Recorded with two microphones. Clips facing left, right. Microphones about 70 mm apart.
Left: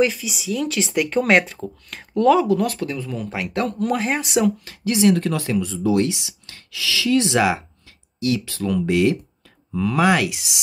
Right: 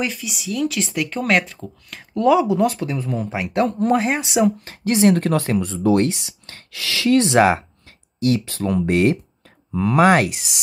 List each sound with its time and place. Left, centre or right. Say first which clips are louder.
0.0 s speech: left 6 dB; centre
3.6 s speech: right 4 dB; right
4.6 s speech: right 1 dB; right